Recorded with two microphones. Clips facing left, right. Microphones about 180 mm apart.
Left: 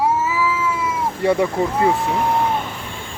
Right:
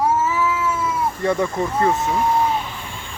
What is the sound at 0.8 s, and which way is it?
Cat, 10° left (ahead or behind).